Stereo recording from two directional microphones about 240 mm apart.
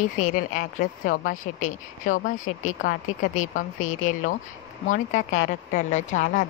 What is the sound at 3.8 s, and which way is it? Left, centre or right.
Speech, left.